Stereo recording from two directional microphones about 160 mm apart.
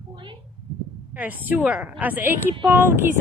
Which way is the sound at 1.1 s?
10° right (ahead or behind).